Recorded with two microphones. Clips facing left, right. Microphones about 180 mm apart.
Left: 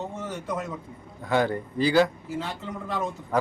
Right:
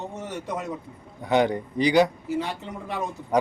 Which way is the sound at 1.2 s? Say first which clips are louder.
Right 3 dB; 20° right (ahead or behind).